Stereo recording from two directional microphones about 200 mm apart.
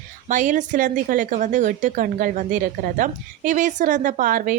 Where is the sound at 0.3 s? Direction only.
40° right (ahead or behind).